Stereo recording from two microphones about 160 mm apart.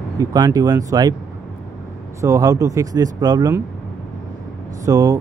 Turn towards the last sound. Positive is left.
turn(degrees=-20)  # may be behind; listen again after turning